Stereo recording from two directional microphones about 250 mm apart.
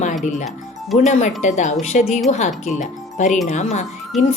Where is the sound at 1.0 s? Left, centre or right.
Left.